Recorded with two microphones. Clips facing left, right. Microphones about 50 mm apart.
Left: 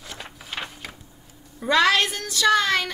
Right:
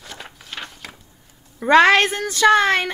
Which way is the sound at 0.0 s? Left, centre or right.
Centre.